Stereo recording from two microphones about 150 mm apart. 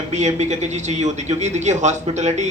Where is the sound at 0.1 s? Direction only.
50° right (ahead or behind).